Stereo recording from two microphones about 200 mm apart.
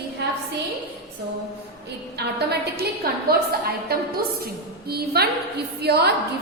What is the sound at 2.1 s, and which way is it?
A woman's voice, 55° right (ahead or behind).